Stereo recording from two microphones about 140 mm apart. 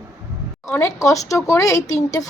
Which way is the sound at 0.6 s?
25° left (ahead or behind).